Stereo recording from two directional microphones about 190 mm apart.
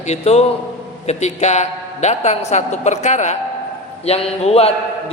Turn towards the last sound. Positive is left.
turn(degrees=30)  # may be behind; listen again after turning